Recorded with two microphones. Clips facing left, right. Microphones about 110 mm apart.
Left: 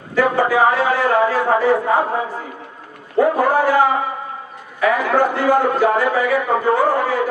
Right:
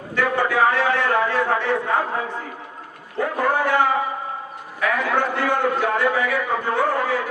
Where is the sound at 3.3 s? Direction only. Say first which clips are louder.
Left 5 dB; 5° left (ahead or behind).